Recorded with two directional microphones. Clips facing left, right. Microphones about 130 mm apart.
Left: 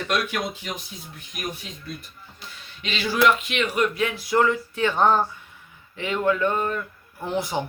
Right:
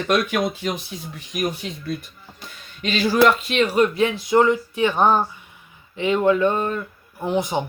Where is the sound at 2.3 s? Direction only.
50° right (ahead or behind); by 7.6 s 20° right (ahead or behind).